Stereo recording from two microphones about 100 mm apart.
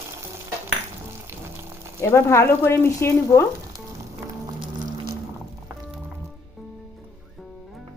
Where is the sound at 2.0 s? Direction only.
30° left (ahead or behind).